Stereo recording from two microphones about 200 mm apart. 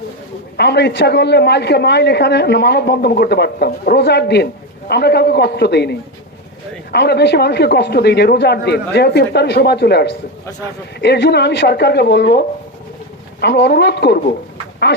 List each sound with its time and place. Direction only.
0.5 s a man's voice: 55° left (ahead or behind)